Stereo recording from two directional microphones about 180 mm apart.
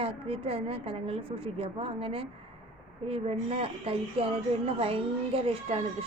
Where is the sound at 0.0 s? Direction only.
30° right (ahead or behind).